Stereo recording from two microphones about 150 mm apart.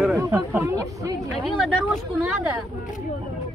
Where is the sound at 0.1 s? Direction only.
15° right (ahead or behind).